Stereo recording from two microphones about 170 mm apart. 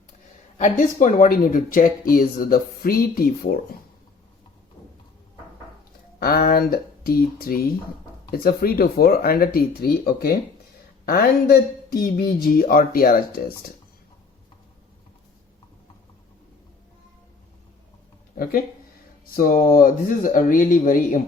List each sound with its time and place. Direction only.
0.6 s speech: 50° left (ahead or behind)
6.1 s speech: 65° left (ahead or behind)
19.3 s speech: 55° left (ahead or behind)